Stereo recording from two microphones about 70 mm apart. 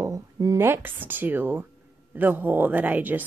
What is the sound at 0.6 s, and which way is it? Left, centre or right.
Speech, right.